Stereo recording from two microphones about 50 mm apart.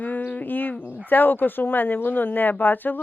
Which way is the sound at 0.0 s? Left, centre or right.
Left.